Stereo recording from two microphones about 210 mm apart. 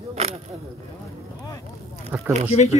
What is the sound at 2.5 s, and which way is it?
Speech, 30° left (ahead or behind).